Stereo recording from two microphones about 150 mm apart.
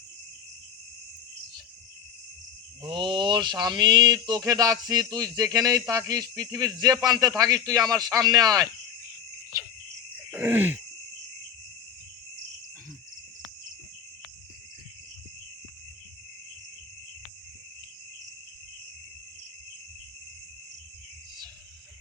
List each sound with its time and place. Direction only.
2.8 s speech: 30° right (ahead or behind)
10.3 s groan: 15° right (ahead or behind)